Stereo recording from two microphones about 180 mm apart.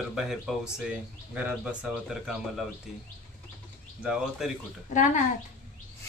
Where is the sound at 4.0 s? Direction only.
5° right (ahead or behind).